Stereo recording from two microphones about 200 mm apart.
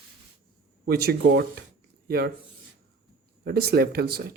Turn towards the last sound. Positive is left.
turn(degrees=-50)  # may be behind; listen again after turning